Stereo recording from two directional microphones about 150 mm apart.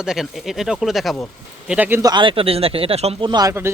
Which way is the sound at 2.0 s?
30° right (ahead or behind).